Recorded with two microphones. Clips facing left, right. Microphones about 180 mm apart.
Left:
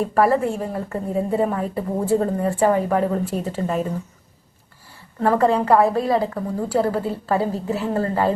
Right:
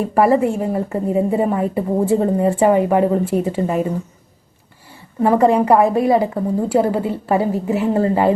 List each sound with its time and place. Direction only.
0.1 s a woman's voice: 15° right (ahead or behind)
5.2 s a woman's voice: 15° right (ahead or behind)